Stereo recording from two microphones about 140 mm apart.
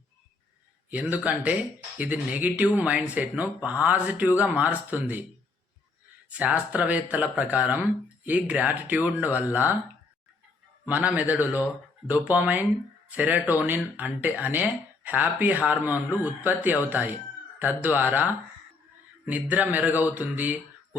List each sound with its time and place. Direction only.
0.9 s speech: 10° right (ahead or behind)
6.3 s speech: 10° right (ahead or behind)
10.8 s speech: 10° right (ahead or behind)